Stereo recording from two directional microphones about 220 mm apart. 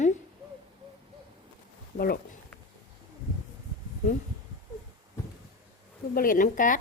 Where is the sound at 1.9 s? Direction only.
40° left (ahead or behind).